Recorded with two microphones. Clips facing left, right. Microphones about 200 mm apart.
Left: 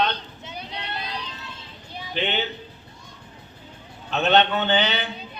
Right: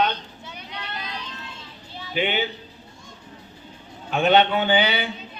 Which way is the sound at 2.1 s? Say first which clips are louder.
Right 2 dB; 10° right (ahead or behind).